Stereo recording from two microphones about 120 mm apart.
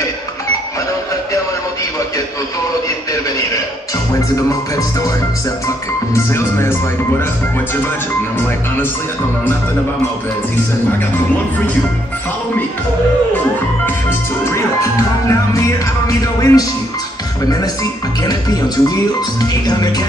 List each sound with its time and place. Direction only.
6.1 s speech: 20° left (ahead or behind)
14.5 s speech: 25° left (ahead or behind)
18.2 s music: 30° left (ahead or behind)